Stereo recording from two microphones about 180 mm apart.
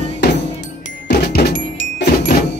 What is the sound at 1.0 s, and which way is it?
Music, 60° left (ahead or behind).